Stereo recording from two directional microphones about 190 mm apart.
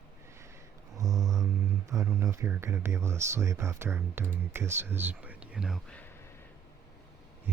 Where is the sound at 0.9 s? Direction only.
15° right (ahead or behind).